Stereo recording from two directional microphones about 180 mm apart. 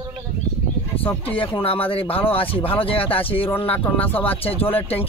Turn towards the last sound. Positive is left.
turn(degrees=10)  # may be behind; listen again after turning